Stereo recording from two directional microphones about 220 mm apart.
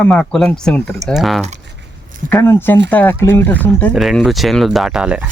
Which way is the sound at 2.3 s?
10° left (ahead or behind).